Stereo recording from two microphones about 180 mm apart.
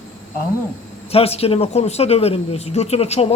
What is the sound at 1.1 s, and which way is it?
Speech, 35° left (ahead or behind).